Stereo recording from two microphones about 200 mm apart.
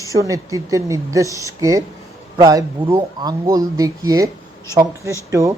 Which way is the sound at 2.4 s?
20° right (ahead or behind).